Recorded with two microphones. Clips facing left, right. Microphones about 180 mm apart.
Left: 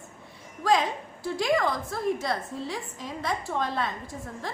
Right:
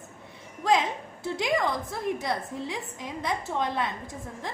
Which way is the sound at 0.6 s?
20° right (ahead or behind).